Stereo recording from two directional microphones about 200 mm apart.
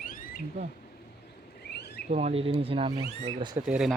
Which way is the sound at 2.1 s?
30° right (ahead or behind).